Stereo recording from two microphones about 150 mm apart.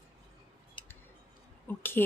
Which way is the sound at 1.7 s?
15° left (ahead or behind).